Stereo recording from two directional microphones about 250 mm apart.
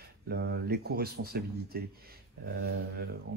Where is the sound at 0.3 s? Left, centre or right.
Right.